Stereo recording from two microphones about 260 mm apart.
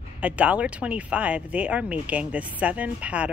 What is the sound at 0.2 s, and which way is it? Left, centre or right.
Speech, centre.